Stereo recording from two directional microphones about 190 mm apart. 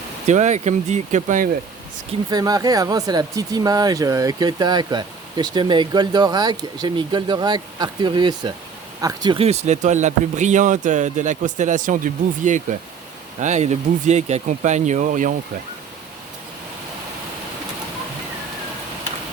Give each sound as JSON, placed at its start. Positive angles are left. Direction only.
{"t": 0.3, "sound": "a man's voice", "side_deg": -40}
{"t": 2.3, "sound": "a man's voice", "side_deg": -20}